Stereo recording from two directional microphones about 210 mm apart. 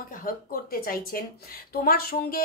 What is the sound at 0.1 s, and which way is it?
A woman's voice, 40° left (ahead or behind).